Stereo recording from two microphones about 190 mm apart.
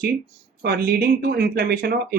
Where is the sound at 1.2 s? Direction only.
55° right (ahead or behind).